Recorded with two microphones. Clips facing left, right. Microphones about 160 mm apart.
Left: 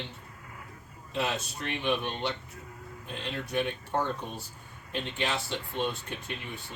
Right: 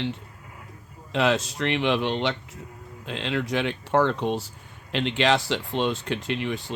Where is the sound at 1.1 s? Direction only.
90° right.